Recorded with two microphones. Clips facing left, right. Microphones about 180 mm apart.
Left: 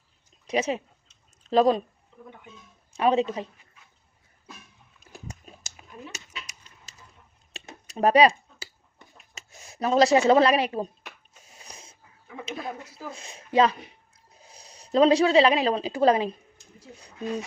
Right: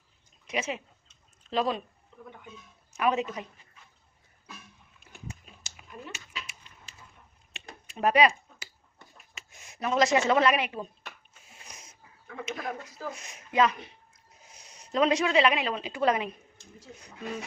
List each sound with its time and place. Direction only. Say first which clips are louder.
0.4 s speech: left 7 dB; 35° left (ahead or behind)
2.9 s a woman's voice: left 5 dB; 30° left (ahead or behind)
4.9 s dog: left 2 dB; 40° left (ahead or behind)
7.5 s a sound: left 7 dB; 35° left (ahead or behind)
9.3 s speech: left 4 dB; 35° left (ahead or behind)
11.4 s wheeze: left 3 dB; 35° left (ahead or behind)
12.5 s a sound: left 1 dB; 30° left (ahead or behind)
13.1 s a woman's voice: left 4 dB; 30° left (ahead or behind)